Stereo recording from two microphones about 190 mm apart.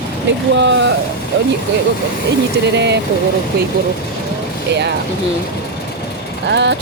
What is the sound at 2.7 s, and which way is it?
Speech, 65° right (ahead or behind).